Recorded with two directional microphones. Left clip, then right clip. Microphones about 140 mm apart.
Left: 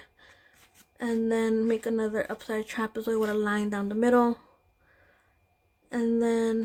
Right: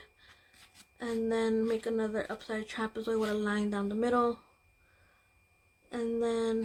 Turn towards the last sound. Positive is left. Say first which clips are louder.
# left 5 dB
turn(degrees=65)  # may be behind; listen again after turning